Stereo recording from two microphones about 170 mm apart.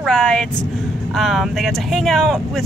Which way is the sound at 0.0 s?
5° left (ahead or behind).